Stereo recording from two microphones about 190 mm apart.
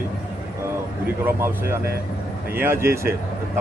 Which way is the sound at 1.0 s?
10° right (ahead or behind).